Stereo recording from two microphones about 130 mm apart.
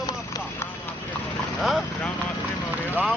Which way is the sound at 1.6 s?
Centre (ahead or behind).